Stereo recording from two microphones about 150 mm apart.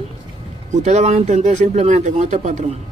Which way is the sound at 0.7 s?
50° right (ahead or behind).